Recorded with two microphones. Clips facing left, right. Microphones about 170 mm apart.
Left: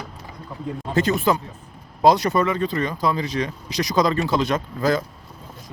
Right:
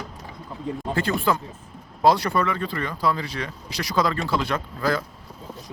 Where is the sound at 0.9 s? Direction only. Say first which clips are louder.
Left 5 dB; 20° left (ahead or behind).